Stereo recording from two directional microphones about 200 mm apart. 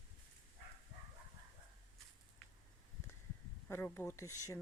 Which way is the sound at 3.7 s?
10° left (ahead or behind).